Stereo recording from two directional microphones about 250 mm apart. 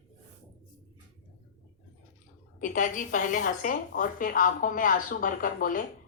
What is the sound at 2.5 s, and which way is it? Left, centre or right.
A woman's voice, left.